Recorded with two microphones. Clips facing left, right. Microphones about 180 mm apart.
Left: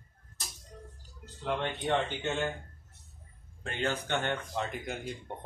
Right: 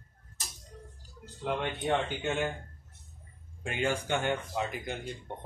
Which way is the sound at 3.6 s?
10° right (ahead or behind).